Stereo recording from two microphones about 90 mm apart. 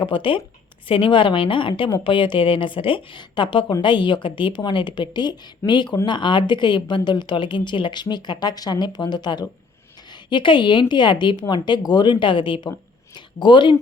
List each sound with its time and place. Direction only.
0.0 s a woman's voice: 65° left (ahead or behind)